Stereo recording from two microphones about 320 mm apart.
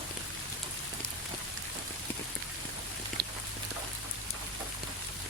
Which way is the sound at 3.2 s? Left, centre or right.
Right.